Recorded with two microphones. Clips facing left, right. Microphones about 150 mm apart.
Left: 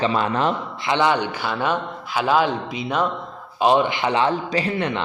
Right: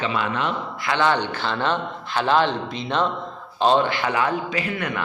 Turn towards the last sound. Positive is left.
turn(degrees=30)  # may be behind; listen again after turning